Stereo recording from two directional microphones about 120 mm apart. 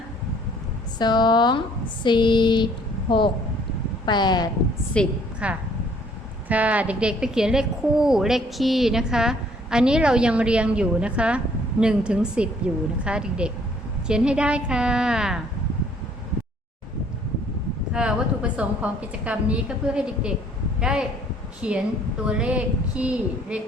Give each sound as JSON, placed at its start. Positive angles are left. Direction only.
{"t": 0.9, "sound": "speech", "side_deg": 35}
{"t": 4.9, "sound": "a woman's voice", "side_deg": 10}
{"t": 5.4, "sound": "a woman's voice", "side_deg": -10}
{"t": 17.9, "sound": "a woman's voice", "side_deg": -10}